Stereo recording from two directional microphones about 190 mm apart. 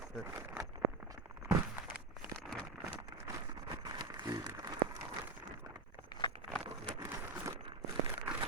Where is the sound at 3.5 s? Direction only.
20° right (ahead or behind).